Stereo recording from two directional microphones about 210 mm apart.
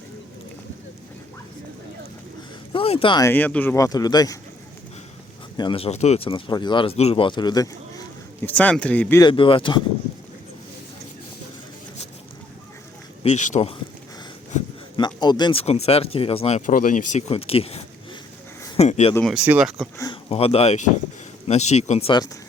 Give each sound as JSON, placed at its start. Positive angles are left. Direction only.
{"t": 2.7, "sound": "speech", "side_deg": 25}
{"t": 5.5, "sound": "speech", "side_deg": 25}
{"t": 8.4, "sound": "speech", "side_deg": 5}
{"t": 9.3, "sound": "speech", "side_deg": 25}
{"t": 13.2, "sound": "speech", "side_deg": 35}
{"t": 14.9, "sound": "speech", "side_deg": 20}
{"t": 19.1, "sound": "speech", "side_deg": 0}
{"t": 20.3, "sound": "speech", "side_deg": 30}